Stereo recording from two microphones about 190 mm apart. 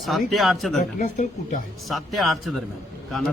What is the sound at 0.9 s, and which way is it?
Speech, 40° left (ahead or behind).